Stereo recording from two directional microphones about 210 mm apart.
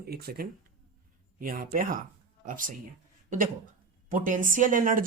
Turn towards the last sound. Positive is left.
turn(degrees=-40)  # may be behind; listen again after turning